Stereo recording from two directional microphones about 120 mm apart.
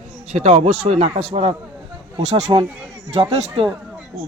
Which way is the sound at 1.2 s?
50° right (ahead or behind).